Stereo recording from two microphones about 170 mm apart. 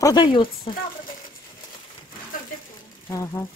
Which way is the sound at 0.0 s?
25° left (ahead or behind).